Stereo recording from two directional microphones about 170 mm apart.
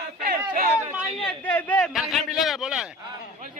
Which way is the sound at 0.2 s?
60° right (ahead or behind).